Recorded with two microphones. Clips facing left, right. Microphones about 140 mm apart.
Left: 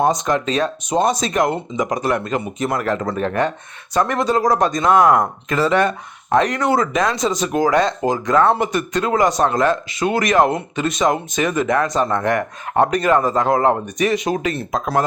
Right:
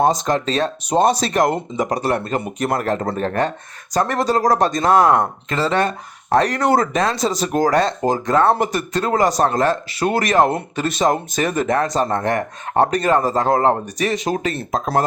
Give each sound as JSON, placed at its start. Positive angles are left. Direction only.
{"t": 0.0, "sound": "speech", "side_deg": -35}